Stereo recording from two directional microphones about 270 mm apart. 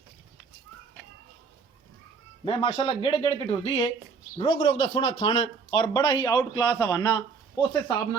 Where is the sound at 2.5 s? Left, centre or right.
Left.